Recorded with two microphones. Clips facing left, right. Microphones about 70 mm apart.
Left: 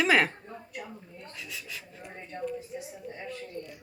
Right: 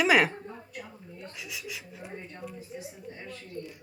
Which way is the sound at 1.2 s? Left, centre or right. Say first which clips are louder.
Right 3 dB; centre.